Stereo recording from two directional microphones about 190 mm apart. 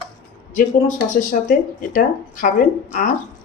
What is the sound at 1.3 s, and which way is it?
Speech, 40° left (ahead or behind).